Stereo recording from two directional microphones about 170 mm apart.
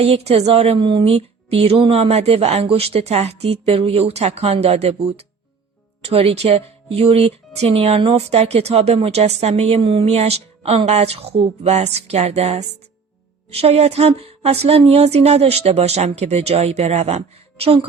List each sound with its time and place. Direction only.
0.0 s speech: 35° right (ahead or behind)